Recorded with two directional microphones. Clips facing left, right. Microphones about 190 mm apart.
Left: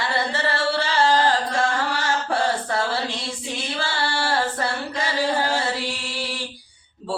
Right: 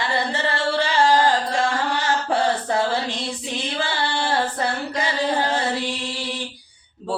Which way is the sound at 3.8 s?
20° right (ahead or behind).